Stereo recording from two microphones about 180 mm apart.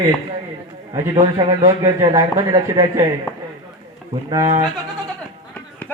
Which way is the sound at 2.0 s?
20° right (ahead or behind).